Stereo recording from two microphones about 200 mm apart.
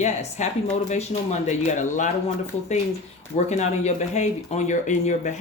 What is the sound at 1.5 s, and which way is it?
Speech, 35° left (ahead or behind).